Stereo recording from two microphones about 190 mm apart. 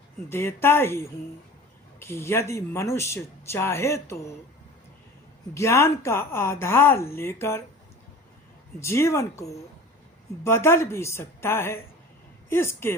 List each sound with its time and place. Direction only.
0.3 s speech: 15° left (ahead or behind)
5.5 s speech: 15° left (ahead or behind)
8.8 s speech: 15° left (ahead or behind)